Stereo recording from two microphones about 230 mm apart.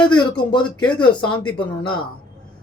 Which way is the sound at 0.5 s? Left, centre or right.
Centre.